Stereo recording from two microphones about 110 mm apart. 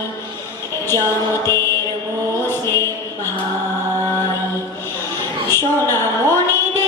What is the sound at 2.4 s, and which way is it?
Mantra, 20° left (ahead or behind).